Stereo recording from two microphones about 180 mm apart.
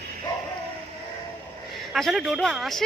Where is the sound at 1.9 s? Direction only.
Centre (ahead or behind).